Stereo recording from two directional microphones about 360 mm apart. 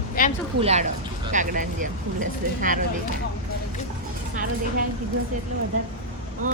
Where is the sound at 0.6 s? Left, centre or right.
Centre.